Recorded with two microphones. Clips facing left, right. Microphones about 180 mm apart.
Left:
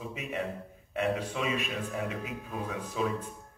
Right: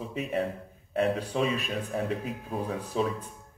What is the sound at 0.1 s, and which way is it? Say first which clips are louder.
A man's voice: right 7 dB; 35° right (ahead or behind).